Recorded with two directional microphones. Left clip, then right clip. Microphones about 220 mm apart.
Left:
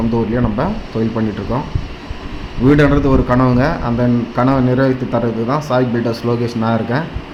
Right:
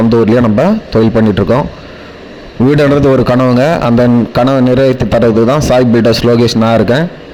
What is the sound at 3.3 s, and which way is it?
Speech, 40° right (ahead or behind).